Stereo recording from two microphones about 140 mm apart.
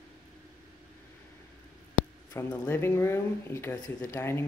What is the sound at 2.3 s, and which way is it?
Speech, 15° left (ahead or behind).